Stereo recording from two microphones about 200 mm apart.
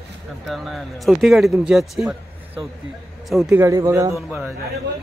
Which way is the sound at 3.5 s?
15° right (ahead or behind).